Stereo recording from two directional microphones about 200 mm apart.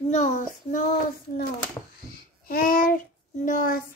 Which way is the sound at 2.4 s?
45° left (ahead or behind).